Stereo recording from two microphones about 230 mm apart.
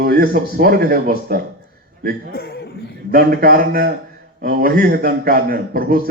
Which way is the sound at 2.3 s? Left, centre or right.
Left.